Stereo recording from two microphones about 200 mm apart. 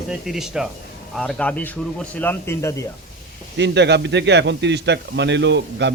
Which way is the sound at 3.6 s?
60° right (ahead or behind).